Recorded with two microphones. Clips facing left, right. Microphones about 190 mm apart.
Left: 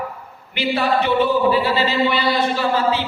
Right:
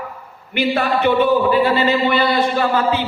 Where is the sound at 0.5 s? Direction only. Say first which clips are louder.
Right 1 dB; 55° right (ahead or behind).